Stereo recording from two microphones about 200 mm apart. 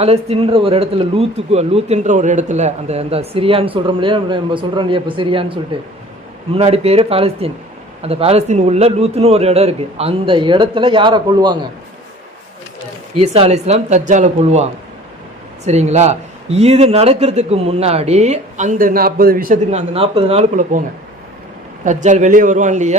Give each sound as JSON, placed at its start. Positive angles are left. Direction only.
{"t": 0.0, "sound": "speech", "side_deg": -30}
{"t": 13.2, "sound": "a man's voice", "side_deg": -30}
{"t": 19.9, "sound": "a man's voice", "side_deg": -30}
{"t": 21.8, "sound": "a man's voice", "side_deg": -40}